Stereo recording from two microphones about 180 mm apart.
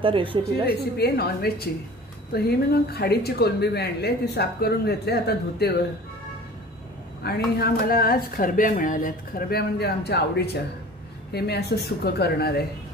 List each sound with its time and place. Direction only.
0.0 s a woman's voice: 30° right (ahead or behind)
0.7 s speech: 60° left (ahead or behind)
7.2 s speech: 60° left (ahead or behind)